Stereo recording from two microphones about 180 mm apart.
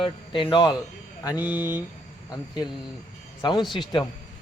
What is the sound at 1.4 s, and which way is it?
Speech, 10° right (ahead or behind).